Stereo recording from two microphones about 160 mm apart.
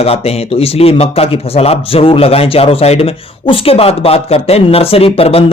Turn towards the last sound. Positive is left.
turn(degrees=35)  # may be behind; listen again after turning